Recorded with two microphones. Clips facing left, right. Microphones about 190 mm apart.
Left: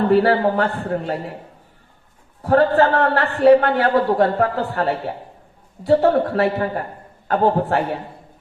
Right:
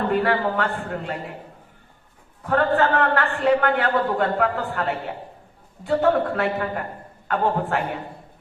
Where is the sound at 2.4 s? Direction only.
35° left (ahead or behind).